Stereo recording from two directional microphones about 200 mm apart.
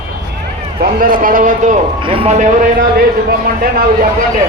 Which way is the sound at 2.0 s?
25° right (ahead or behind).